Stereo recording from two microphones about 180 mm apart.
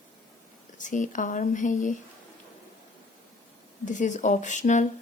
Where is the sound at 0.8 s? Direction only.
45° left (ahead or behind).